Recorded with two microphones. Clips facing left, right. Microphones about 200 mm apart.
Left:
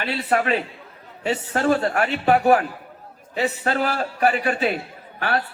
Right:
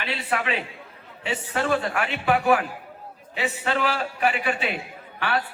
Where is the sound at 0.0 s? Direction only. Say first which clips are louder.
Left 5 dB; 45° left (ahead or behind).